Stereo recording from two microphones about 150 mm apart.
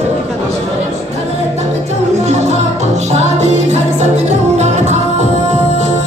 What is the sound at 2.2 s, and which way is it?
Music, 50° right (ahead or behind).